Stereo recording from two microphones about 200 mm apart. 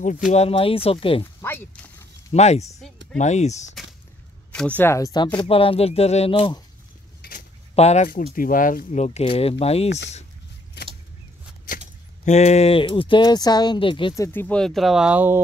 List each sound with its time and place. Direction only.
0.3 s speech: 30° left (ahead or behind)
1.2 s a sound: 10° left (ahead or behind)
2.3 s speech: 35° left (ahead or behind)
4.5 s speech: 5° left (ahead or behind); by 6.6 s 25° left (ahead or behind)
7.2 s a sound: 45° left (ahead or behind)
7.7 s speech: 35° left (ahead or behind)
12.3 s speech: 35° left (ahead or behind); by 15.4 s 10° right (ahead or behind)